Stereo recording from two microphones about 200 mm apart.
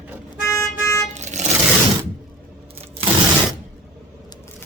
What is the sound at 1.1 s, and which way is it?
Vehicle, 35° right (ahead or behind).